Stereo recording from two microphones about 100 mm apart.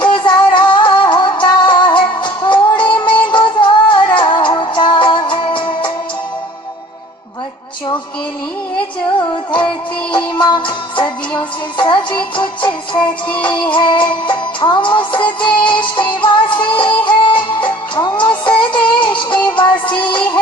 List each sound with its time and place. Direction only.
0.0 s music: 50° left (ahead or behind)
10.3 s music: 50° left (ahead or behind)
13.0 s music: 15° left (ahead or behind)
13.7 s music: 55° left (ahead or behind)
18.7 s synthetic singing: 50° left (ahead or behind)
19.3 s music: 15° left (ahead or behind)
19.5 s music: 50° left (ahead or behind)
19.9 s synthetic singing: 50° left (ahead or behind)